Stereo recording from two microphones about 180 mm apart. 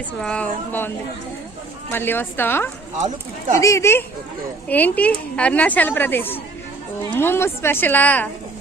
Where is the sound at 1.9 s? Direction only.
10° left (ahead or behind).